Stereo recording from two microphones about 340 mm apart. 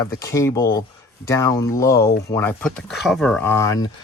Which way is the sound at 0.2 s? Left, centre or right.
Centre.